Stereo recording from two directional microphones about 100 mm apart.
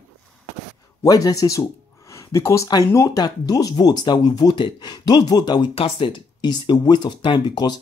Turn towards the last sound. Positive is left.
turn(degrees=50)  # may be behind; listen again after turning